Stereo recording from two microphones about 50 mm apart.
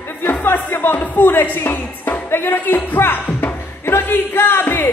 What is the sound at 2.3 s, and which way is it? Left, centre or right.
Speech, left.